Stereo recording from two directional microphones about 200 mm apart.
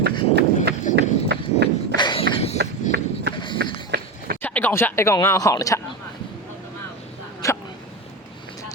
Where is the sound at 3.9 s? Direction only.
55° right (ahead or behind).